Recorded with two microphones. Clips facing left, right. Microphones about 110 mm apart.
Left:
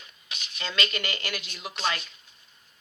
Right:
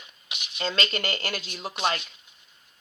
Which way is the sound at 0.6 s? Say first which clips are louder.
Right 3 dB; 35° right (ahead or behind).